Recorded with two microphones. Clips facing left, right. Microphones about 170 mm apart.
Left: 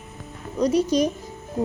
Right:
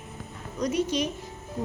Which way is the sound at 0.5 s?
35° left (ahead or behind).